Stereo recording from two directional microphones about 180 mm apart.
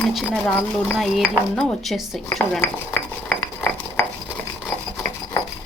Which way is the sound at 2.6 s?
10° left (ahead or behind).